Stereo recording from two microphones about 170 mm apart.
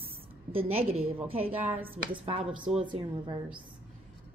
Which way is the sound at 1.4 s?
10° right (ahead or behind).